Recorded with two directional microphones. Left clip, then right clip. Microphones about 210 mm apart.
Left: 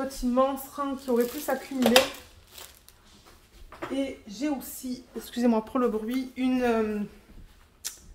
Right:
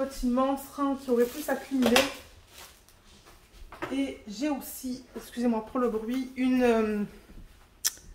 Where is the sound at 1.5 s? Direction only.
65° left (ahead or behind).